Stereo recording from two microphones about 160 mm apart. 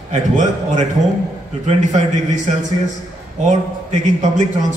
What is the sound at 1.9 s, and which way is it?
Speech, 50° right (ahead or behind).